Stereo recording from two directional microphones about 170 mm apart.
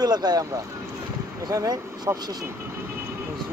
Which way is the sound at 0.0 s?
25° right (ahead or behind).